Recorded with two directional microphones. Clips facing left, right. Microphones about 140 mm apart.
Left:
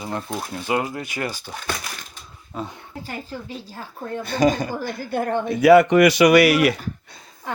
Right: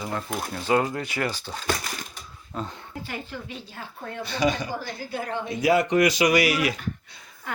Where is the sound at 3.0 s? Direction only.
40° left (ahead or behind); by 7.1 s 65° left (ahead or behind).